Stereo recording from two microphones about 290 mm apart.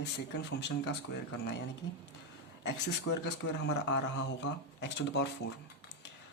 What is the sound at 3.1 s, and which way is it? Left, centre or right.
Speech, left.